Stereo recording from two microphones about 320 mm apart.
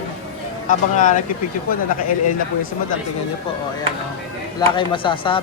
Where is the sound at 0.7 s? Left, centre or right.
Left.